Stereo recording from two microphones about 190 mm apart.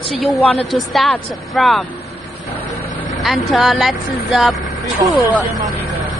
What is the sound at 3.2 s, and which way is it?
A woman's voice, centre (ahead or behind).